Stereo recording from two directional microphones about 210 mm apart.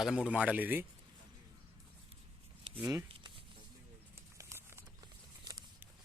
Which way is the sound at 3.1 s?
25° right (ahead or behind).